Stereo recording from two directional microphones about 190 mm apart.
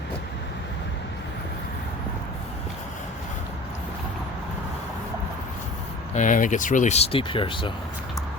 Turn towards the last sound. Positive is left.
turn(degrees=25)  # may be behind; listen again after turning